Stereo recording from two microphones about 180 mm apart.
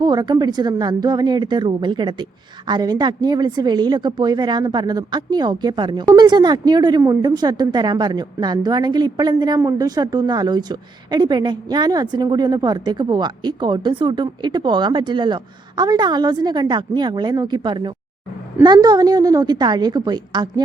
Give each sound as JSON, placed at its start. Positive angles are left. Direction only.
{"t": 0.0, "sound": "a woman's voice", "side_deg": -25}